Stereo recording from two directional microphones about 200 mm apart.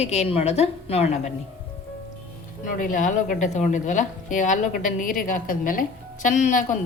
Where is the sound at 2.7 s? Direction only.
40° left (ahead or behind).